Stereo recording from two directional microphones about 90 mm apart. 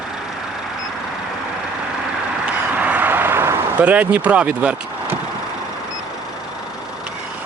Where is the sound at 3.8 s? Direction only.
15° right (ahead or behind).